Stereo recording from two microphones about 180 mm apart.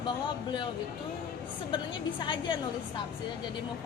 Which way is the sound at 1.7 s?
25° left (ahead or behind).